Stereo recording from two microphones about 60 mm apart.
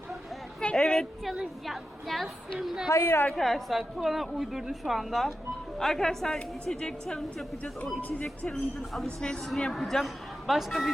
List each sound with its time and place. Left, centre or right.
0.6 s a sound: centre
1.6 s a man's voice: centre
2.9 s a woman's voice: left
3.3 s a man's voice: centre
8.8 s a man's voice: centre